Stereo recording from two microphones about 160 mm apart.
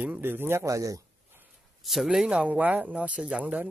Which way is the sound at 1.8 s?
Centre (ahead or behind).